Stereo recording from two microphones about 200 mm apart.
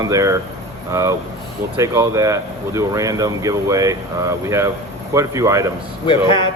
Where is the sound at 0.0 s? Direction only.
15° right (ahead or behind).